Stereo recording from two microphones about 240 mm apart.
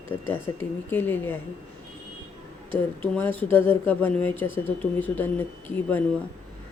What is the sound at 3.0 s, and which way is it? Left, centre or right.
Speech, centre.